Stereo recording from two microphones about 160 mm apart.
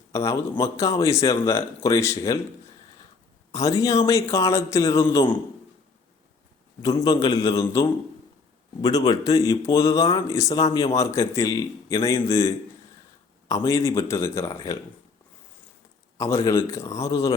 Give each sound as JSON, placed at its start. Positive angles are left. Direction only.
{"t": 0.1, "sound": "a man's voice", "side_deg": 20}
{"t": 3.5, "sound": "a man's voice", "side_deg": 20}
{"t": 6.9, "sound": "a man's voice", "side_deg": 25}
{"t": 8.8, "sound": "a man's voice", "side_deg": 25}
{"t": 13.7, "sound": "a man's voice", "side_deg": 20}
{"t": 16.1, "sound": "a man's voice", "side_deg": 20}